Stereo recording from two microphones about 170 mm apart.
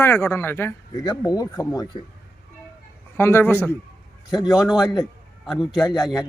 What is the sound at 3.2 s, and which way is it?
Speech, 15° left (ahead or behind).